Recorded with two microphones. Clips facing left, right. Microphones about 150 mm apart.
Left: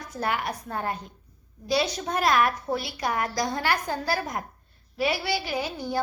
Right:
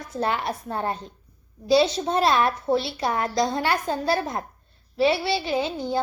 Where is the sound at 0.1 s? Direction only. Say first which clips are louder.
Right 3 dB; 25° right (ahead or behind).